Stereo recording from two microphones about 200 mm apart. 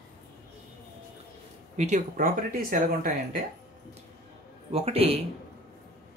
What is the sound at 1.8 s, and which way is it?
Speech, 35° right (ahead or behind).